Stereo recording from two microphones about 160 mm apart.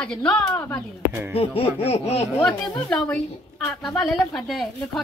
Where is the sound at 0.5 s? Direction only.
20° left (ahead or behind).